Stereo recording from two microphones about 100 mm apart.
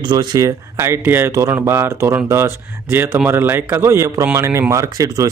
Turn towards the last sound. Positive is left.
turn(degrees=-35)  # may be behind; listen again after turning